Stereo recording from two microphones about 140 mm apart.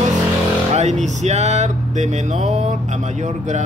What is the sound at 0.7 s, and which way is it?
Speech, 55° right (ahead or behind).